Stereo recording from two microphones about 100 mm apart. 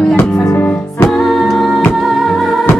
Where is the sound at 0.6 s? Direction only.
20° left (ahead or behind).